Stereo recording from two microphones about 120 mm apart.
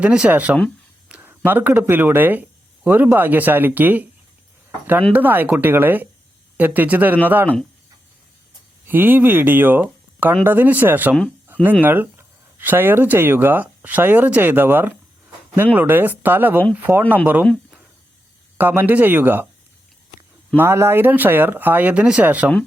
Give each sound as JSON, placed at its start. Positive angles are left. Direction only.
{"t": 0.0, "sound": "speech", "side_deg": -10}
{"t": 5.1, "sound": "speech", "side_deg": -15}
{"t": 8.9, "sound": "speech", "side_deg": -15}
{"t": 18.5, "sound": "speech", "side_deg": -15}
{"t": 20.6, "sound": "speech", "side_deg": -20}